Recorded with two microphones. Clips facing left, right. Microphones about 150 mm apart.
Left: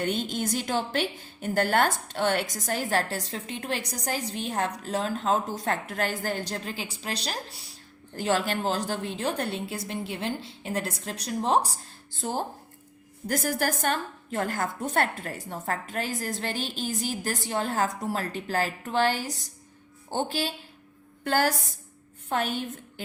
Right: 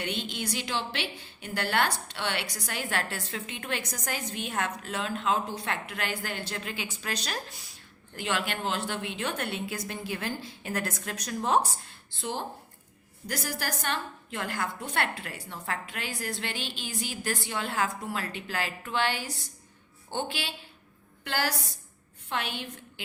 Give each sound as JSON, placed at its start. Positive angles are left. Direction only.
{"t": 0.0, "sound": "a woman's voice", "side_deg": 45}